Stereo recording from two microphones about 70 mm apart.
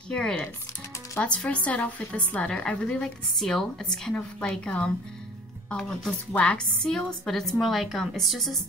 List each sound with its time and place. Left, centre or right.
0.1 s a woman's voice: centre